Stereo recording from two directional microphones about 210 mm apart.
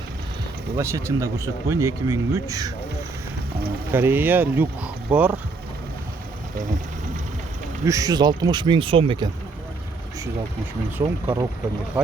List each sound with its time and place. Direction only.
0.8 s speech: 15° right (ahead or behind)
3.9 s speech: 10° right (ahead or behind)
7.9 s speech: 15° right (ahead or behind)
11.0 s speech: 20° right (ahead or behind)